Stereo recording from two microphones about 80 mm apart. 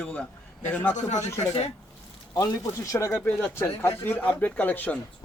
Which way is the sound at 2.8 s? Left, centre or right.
Left.